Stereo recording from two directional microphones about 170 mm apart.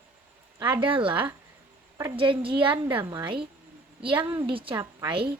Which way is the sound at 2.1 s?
30° right (ahead or behind).